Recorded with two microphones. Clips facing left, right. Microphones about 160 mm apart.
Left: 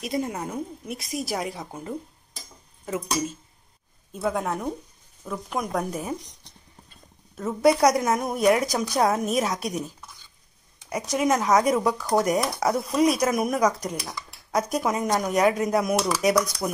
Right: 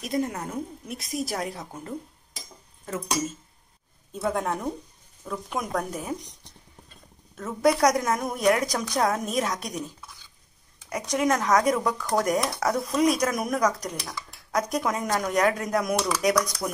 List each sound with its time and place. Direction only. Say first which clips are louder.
0.1 s a woman's voice: right 1 dB; 5° left (ahead or behind)
4.1 s a woman's voice: left 1 dB; 5° left (ahead or behind)
7.3 s a woman's voice: left 3 dB; 10° left (ahead or behind)
11.0 s a woman's voice: left 1 dB; 5° left (ahead or behind)
11.3 s a woman's voice: left 3 dB; 20° left (ahead or behind)
11.8 s a woman's voice: left 3 dB; 5° left (ahead or behind)
15.7 s a woman's voice: left 2 dB; 5° left (ahead or behind)